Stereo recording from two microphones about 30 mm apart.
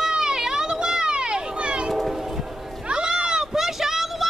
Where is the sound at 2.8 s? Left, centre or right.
Right; by 4.2 s centre.